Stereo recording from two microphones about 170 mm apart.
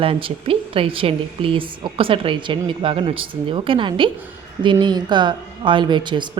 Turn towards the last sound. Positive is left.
turn(degrees=-25)  # may be behind; listen again after turning